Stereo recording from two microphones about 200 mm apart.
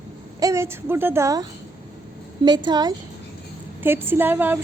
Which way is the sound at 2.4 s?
20° right (ahead or behind).